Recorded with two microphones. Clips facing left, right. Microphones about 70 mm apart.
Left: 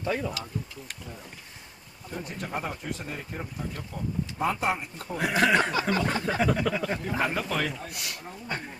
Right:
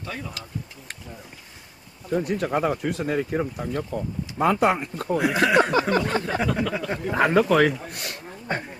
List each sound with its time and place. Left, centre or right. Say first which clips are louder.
0.0 s speech: left 5 dB; centre
2.0 s speech: right 12 dB; right
5.2 s speech: right 2 dB; centre
5.6 s speech: right 6 dB; right
6.2 s speech: right 1 dB; centre
7.1 s speech: right 13 dB; right
7.9 s speech: right 3 dB; right